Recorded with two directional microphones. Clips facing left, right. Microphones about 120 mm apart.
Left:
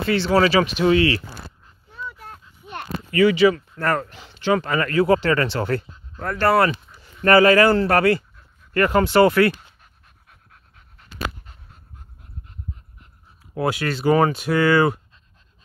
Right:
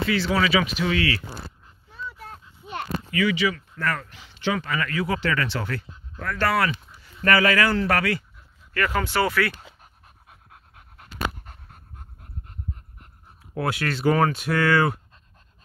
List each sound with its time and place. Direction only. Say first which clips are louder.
0.2 s speech: left 8 dB; 35° left (ahead or behind)
3.1 s speech: left 9 dB; 35° left (ahead or behind)
9.8 s pant: right 3 dB; 45° right (ahead or behind)
11.4 s pant: right 2 dB; 55° right (ahead or behind)
13.6 s speech: left 3 dB; centre (ahead or behind)